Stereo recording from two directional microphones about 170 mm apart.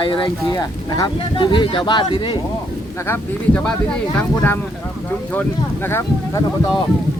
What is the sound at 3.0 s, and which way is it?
Speech, 15° left (ahead or behind).